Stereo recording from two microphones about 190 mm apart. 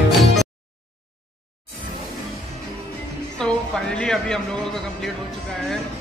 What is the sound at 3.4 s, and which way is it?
Music, 5° left (ahead or behind).